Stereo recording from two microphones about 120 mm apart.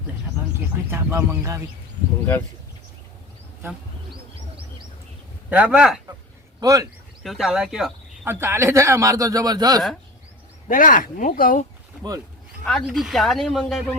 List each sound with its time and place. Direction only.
0.9 s a man's voice: 20° right (ahead or behind)
5.5 s speech: 10° right (ahead or behind)
6.6 s speech: 30° right (ahead or behind)
7.2 s speech: centre (ahead or behind)
8.2 s a man's voice: 20° right (ahead or behind)
10.7 s speech: 90° left
12.8 s speech: centre (ahead or behind)